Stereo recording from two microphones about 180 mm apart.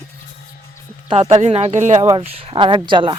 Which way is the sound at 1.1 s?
35° right (ahead or behind).